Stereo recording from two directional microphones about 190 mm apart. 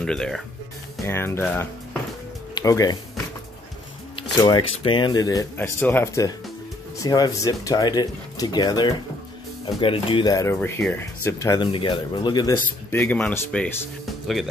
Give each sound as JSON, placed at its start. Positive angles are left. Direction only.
{"t": 0.0, "sound": "speech", "side_deg": 5}
{"t": 4.2, "sound": "speech", "side_deg": 25}
{"t": 12.9, "sound": "speech", "side_deg": 10}